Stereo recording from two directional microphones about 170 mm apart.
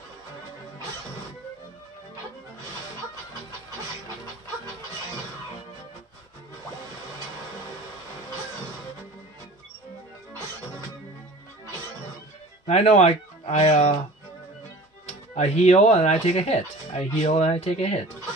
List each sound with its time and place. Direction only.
12.6 s speech: 40° left (ahead or behind)
15.3 s speech: 40° left (ahead or behind)